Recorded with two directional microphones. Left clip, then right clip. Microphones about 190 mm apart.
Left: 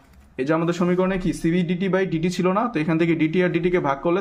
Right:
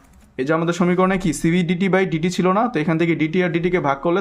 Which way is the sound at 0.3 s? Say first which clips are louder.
Right 2 dB; 15° right (ahead or behind).